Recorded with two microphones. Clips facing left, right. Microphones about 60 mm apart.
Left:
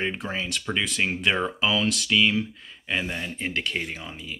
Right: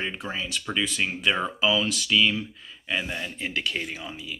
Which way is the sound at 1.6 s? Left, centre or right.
Left.